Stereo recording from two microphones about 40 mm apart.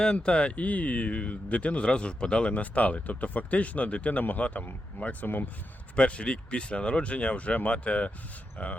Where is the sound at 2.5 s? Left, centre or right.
Left.